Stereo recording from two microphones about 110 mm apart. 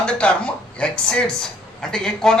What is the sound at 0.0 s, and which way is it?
A woman's voice, 10° left (ahead or behind).